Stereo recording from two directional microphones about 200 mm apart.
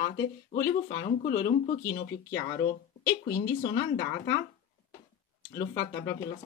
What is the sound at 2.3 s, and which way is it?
Speech, 20° left (ahead or behind).